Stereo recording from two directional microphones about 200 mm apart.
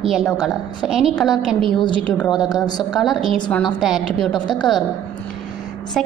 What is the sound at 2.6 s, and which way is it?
Speech, 20° left (ahead or behind).